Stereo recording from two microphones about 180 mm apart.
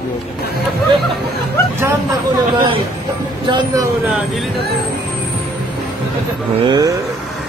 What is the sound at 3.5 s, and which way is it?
Speech, 25° right (ahead or behind).